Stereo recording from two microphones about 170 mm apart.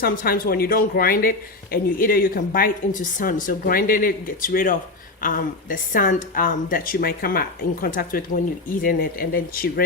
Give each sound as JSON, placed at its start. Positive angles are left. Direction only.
{"t": 0.0, "sound": "speech", "side_deg": 60}